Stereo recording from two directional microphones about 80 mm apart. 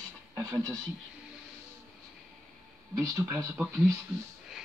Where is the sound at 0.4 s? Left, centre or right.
Right.